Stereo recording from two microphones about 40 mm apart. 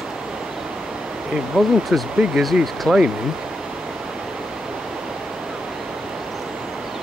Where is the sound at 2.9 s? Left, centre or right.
Centre.